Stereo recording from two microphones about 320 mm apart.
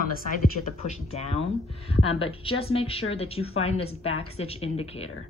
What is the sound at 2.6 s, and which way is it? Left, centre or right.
A woman's voice, centre.